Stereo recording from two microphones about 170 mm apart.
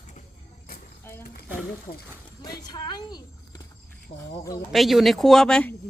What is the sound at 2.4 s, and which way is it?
Speech, 25° left (ahead or behind).